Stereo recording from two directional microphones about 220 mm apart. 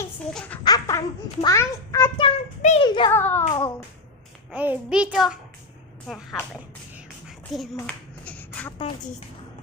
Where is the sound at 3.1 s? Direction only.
10° left (ahead or behind).